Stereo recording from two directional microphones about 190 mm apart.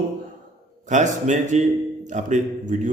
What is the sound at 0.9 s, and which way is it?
A man's voice, 40° right (ahead or behind).